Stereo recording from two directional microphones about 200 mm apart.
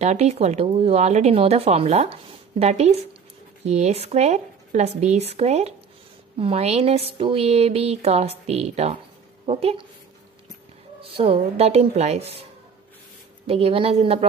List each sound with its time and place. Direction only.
0.0 s a woman's voice: 35° right (ahead or behind)
11.0 s speech: 25° right (ahead or behind)
13.5 s a woman's voice: 30° right (ahead or behind)